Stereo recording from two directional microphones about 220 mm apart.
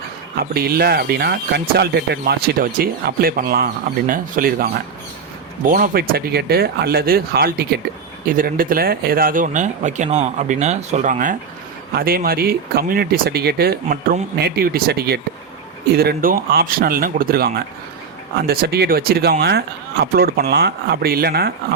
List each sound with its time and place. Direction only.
0.3 s speech: 45° right (ahead or behind)
5.7 s speech: 40° right (ahead or behind)